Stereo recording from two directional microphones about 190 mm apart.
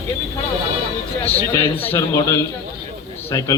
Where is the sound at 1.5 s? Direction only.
10° left (ahead or behind).